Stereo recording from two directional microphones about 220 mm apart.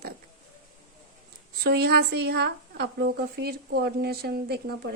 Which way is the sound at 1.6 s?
45° right (ahead or behind).